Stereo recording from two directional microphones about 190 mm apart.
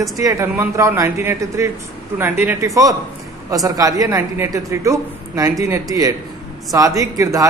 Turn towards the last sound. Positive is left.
turn(degrees=-15)  # may be behind; listen again after turning